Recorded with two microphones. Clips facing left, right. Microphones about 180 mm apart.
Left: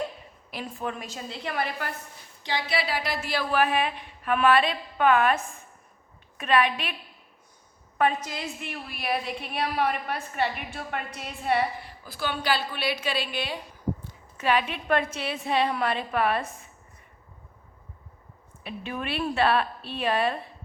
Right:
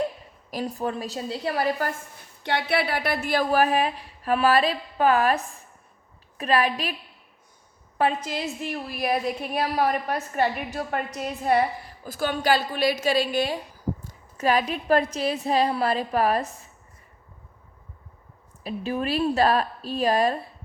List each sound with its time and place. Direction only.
0.5 s a woman's voice: 40° right (ahead or behind)
2.4 s a woman's voice: 60° right (ahead or behind); by 6.9 s 35° right (ahead or behind)
7.9 s a woman's voice: 30° right (ahead or behind)
18.6 s a woman's voice: 35° right (ahead or behind)